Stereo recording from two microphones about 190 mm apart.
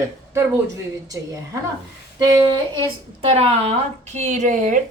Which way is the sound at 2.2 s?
20° right (ahead or behind).